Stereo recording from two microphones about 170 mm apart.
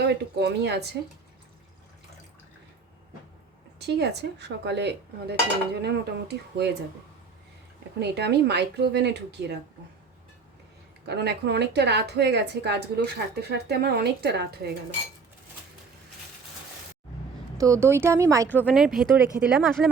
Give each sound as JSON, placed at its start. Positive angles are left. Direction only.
{"t": 0.1, "sound": "dishes", "side_deg": -80}
{"t": 3.8, "sound": "dishes", "side_deg": -75}
{"t": 7.9, "sound": "dishes", "side_deg": -80}
{"t": 11.1, "sound": "a woman's voice", "side_deg": -80}
{"t": 17.6, "sound": "speech", "side_deg": -15}
{"t": 18.4, "sound": "speech", "side_deg": 10}
{"t": 18.7, "sound": "speech", "side_deg": 0}